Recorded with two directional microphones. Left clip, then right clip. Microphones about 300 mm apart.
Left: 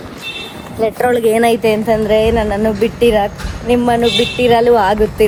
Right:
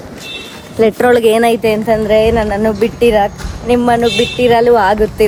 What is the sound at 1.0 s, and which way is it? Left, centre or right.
Speech, right.